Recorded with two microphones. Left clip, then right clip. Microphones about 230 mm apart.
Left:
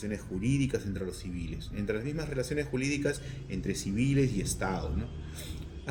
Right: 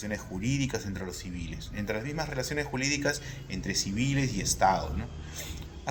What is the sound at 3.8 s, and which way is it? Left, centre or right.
Speech, right.